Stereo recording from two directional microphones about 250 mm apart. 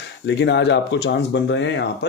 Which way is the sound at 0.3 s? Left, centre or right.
Left.